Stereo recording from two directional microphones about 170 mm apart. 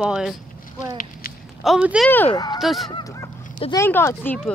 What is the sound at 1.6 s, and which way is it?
Speech, 5° right (ahead or behind).